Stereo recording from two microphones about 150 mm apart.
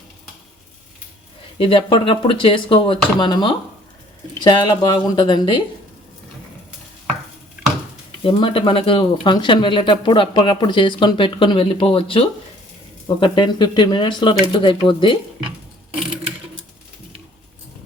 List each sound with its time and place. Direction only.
1.5 s speech: 35° left (ahead or behind)
8.2 s speech: 35° left (ahead or behind)